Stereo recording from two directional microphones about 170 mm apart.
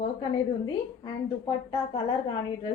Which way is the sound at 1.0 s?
35° left (ahead or behind).